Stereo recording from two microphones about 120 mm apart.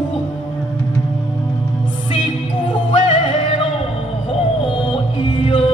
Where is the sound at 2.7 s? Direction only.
45° left (ahead or behind).